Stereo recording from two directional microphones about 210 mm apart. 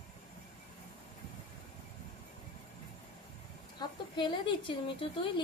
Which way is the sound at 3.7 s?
20° left (ahead or behind).